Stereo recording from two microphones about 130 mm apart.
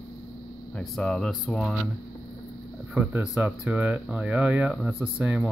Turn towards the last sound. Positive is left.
turn(degrees=-10)  # may be behind; listen again after turning